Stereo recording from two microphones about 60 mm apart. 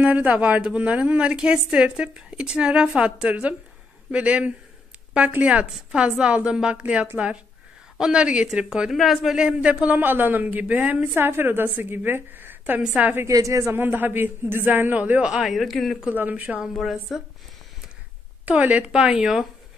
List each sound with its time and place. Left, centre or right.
0.0 s a woman's voice: right
8.9 s a man's voice: centre
9.4 s a woman's voice: centre
9.9 s a woman's voice: right
11.1 s a man's voice: right
13.3 s speech: right
13.7 s a man's voice: right; by 15.4 s centre
15.4 s a man's voice: centre
16.1 s a woman's voice: right
16.6 s a man's voice: centre
18.5 s a woman's voice: right
18.9 s a woman's voice: centre